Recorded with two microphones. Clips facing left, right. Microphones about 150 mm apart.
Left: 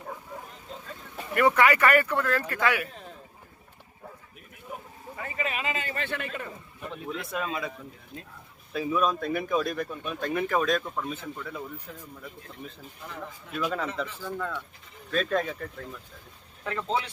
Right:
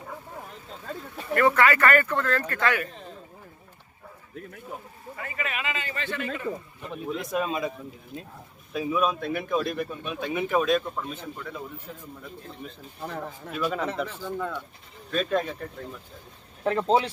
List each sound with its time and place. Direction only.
1.4 s speech: 15° left (ahead or behind)
5.1 s a man's voice: 25° left (ahead or behind); by 6.2 s 55° left (ahead or behind)
6.9 s speech: 15° right (ahead or behind)
8.7 s speech: 10° right (ahead or behind)
11.9 s speech: 25° right (ahead or behind)
13.0 s speech: 50° right (ahead or behind)
13.5 s speech: 5° right (ahead or behind)
14.2 s speech: 15° right (ahead or behind)
16.6 s speech: 35° right (ahead or behind)